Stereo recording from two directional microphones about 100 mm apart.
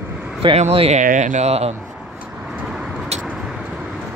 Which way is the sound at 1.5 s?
90° right.